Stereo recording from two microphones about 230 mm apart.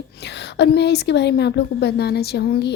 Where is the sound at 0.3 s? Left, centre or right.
Left.